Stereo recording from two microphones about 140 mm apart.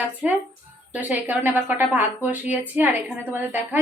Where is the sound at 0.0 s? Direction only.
10° right (ahead or behind).